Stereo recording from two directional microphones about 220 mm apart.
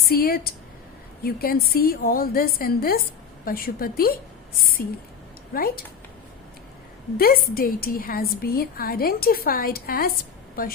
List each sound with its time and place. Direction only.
0.1 s a woman's voice: 45° left (ahead or behind)
7.2 s a woman's voice: 40° left (ahead or behind)